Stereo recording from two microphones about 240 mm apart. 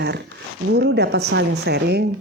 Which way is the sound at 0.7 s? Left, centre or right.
Right.